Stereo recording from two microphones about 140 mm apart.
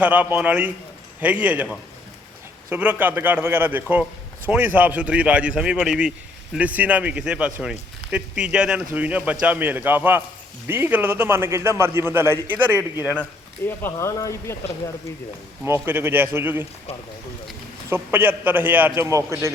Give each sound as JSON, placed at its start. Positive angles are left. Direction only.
{"t": 0.0, "sound": "speech", "side_deg": -10}
{"t": 2.6, "sound": "speech", "side_deg": -15}
{"t": 13.7, "sound": "speech", "side_deg": 20}
{"t": 15.6, "sound": "speech", "side_deg": -15}
{"t": 17.8, "sound": "a man's voice", "side_deg": -15}